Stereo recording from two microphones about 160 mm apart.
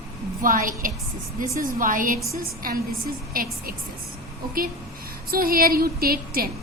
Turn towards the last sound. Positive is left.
turn(degrees=-70)  # may be behind; listen again after turning